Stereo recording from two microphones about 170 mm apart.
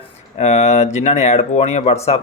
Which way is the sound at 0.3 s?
40° left (ahead or behind).